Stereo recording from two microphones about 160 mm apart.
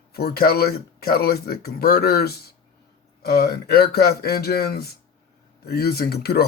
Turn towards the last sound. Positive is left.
turn(degrees=80)